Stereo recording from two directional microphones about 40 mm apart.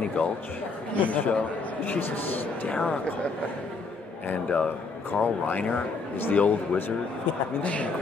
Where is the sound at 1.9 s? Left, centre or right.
Left.